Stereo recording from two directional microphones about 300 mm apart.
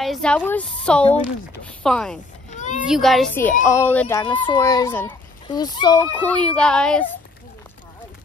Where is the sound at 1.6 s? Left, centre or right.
Centre.